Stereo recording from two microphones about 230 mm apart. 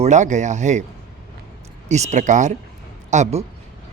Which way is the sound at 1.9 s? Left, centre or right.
Right.